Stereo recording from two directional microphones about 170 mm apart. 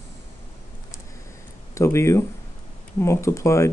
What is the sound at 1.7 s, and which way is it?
Speech, 15° left (ahead or behind).